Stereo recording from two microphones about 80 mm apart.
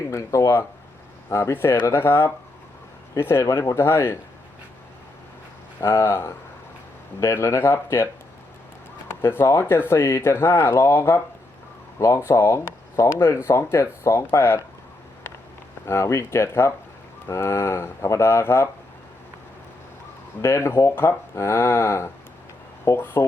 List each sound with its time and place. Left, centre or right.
0.1 s speech: left
5.8 s speech: left
9.2 s speech: left
15.9 s speech: left
20.4 s speech: left